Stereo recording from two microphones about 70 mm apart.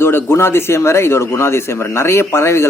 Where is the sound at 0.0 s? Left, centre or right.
Left.